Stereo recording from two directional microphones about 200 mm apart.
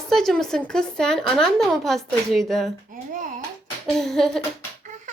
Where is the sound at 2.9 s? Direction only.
40° right (ahead or behind).